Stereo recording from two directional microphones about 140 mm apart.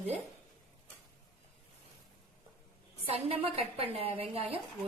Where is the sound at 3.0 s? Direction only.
45° right (ahead or behind).